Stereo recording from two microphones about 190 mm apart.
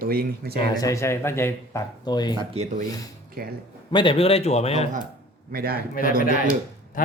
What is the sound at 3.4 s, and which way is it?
Speech, 50° right (ahead or behind).